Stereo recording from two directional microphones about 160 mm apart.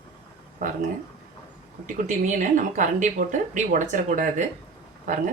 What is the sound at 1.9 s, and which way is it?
Speech, 55° right (ahead or behind).